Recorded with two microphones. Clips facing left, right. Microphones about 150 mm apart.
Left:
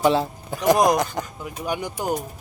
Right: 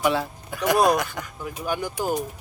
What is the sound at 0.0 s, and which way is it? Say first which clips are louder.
Speech: left 4 dB; 25° left (ahead or behind).